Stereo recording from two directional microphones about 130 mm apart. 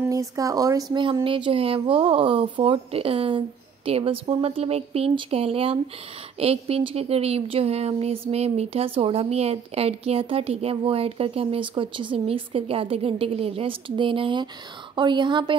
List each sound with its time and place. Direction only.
0.1 s speech: 25° right (ahead or behind)
1.2 s speech: 40° right (ahead or behind)